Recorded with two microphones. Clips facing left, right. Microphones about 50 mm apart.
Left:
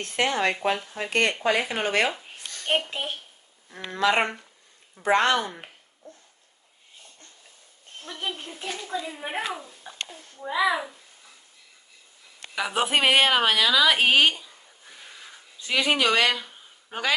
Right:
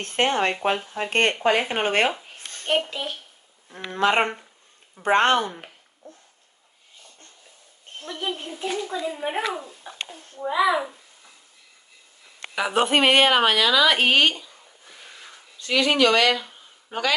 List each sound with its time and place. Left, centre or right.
0.0 s speech: right
2.9 s a child's voice: left
3.9 s speech: right
7.9 s a sound: right
8.5 s a child's voice: centre
9.6 s a sound: right
10.4 s a child's voice: centre
12.5 s a woman's voice: centre
16.4 s a sound: centre